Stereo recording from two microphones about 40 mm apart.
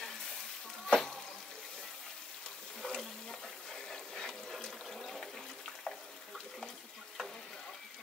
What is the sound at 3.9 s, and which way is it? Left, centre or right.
Water, centre.